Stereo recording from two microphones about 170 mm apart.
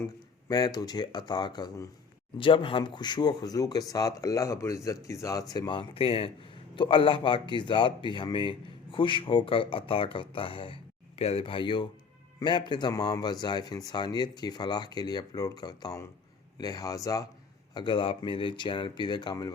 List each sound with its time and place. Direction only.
0.0 s a man's voice: 20° left (ahead or behind)